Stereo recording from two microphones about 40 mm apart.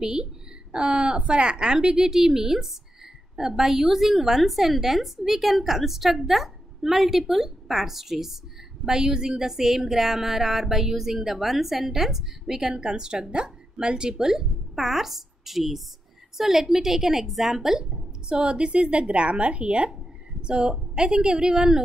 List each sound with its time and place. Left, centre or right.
0.0 s a woman's voice: right
18.3 s speech: right